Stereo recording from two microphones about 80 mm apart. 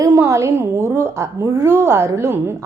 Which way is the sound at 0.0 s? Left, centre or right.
Right.